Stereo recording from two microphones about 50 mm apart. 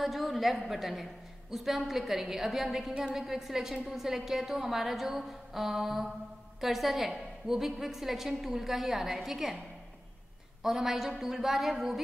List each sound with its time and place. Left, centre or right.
0.0 s a woman's voice: centre
2.9 s a woman's voice: right
3.2 s a woman's voice: centre
10.6 s a woman's voice: centre